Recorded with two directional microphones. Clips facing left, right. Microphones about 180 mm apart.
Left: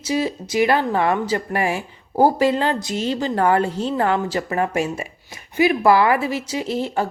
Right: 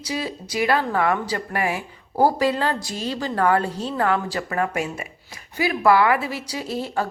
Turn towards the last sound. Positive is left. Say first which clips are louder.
# left 3 dB
turn(degrees=25)  # may be behind; listen again after turning